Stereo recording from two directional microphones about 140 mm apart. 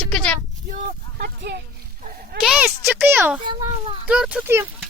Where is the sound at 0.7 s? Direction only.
70° right (ahead or behind).